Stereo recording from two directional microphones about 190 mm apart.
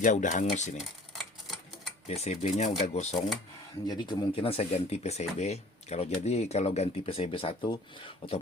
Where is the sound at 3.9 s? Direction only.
25° left (ahead or behind).